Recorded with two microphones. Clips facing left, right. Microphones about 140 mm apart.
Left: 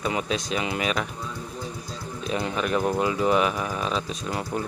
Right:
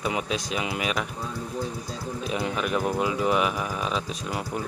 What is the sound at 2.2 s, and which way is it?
Speech, 5° right (ahead or behind).